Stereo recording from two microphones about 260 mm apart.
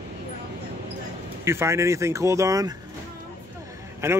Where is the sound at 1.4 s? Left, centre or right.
Centre.